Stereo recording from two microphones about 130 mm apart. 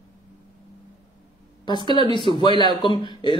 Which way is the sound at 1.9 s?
35° left (ahead or behind).